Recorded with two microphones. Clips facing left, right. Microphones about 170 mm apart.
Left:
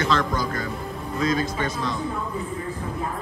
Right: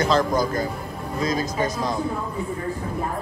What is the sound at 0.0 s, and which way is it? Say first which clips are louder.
Speech: right 4 dB; 40° right (ahead or behind).